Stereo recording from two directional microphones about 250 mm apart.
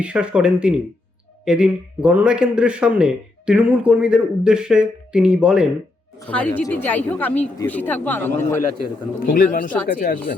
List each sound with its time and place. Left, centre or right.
0.0 s a man's voice: centre
9.2 s speech: left